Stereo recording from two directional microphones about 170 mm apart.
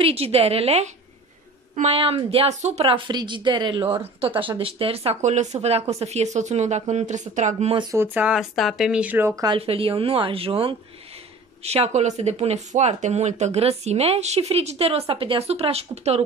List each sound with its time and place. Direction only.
0.0 s a woman's voice: 35° right (ahead or behind)
7.9 s speech: 10° right (ahead or behind)
9.6 s a woman's voice: 35° right (ahead or behind)